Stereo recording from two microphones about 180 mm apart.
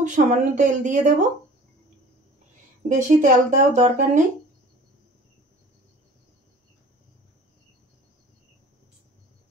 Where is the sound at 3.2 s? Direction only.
45° right (ahead or behind).